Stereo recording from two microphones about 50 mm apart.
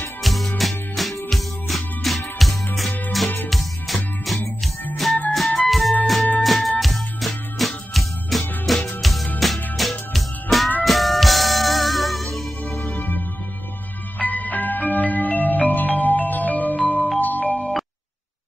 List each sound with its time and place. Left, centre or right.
0.2 s music: centre
12.9 s music: left
14.1 s marimba: left
17.2 s music: left